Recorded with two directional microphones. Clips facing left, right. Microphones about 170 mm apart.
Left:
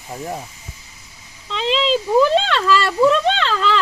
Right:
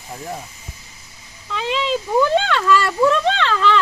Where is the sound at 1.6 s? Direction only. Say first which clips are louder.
Left 3 dB; 30° left (ahead or behind).